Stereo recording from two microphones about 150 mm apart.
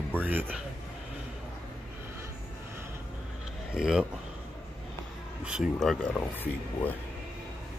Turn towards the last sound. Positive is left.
turn(degrees=15)  # may be behind; listen again after turning